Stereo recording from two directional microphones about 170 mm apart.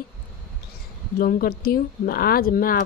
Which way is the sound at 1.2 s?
60° left (ahead or behind).